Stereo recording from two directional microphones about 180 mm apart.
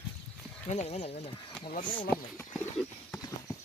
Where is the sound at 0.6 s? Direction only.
40° left (ahead or behind).